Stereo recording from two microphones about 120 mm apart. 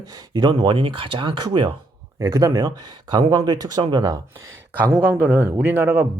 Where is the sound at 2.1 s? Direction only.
25° right (ahead or behind).